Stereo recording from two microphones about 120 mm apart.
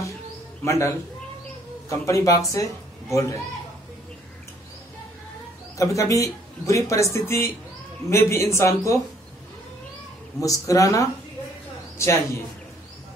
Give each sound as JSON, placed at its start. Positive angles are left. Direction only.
{"t": 0.7, "sound": "speech", "side_deg": 25}
{"t": 5.8, "sound": "speech", "side_deg": 25}
{"t": 10.4, "sound": "speech", "side_deg": 30}